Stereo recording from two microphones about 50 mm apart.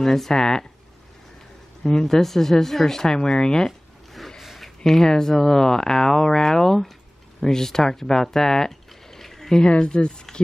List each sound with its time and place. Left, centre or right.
0.0 s speech: centre
1.8 s speech: centre
4.4 s a sound: centre
4.8 s speech: centre
9.7 s speech: centre